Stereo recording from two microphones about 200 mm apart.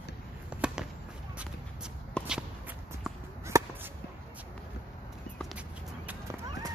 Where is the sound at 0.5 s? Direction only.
5° right (ahead or behind).